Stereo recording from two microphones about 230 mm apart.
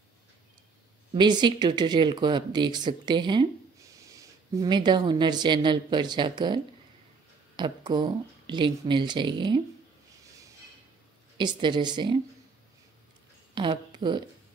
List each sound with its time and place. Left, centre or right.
1.1 s a woman's voice: centre
11.3 s speech: centre
13.6 s speech: centre